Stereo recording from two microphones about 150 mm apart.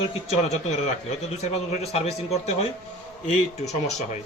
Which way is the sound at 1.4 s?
45° left (ahead or behind).